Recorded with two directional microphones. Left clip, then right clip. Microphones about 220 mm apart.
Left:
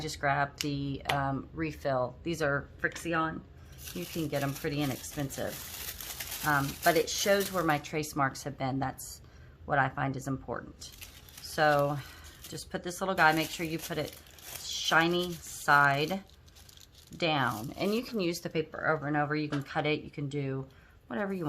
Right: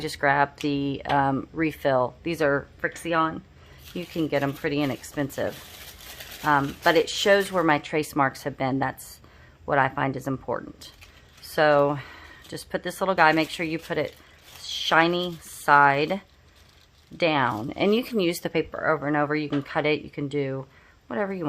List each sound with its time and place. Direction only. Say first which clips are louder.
0.0 s speech: right 8 dB; 45° right (ahead or behind)